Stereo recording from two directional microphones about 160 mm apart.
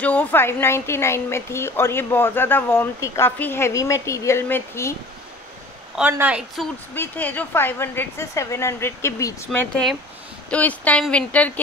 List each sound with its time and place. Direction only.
0.0 s a woman's voice: 10° left (ahead or behind)
5.9 s a woman's voice: 10° right (ahead or behind)
7.0 s a woman's voice: 10° left (ahead or behind)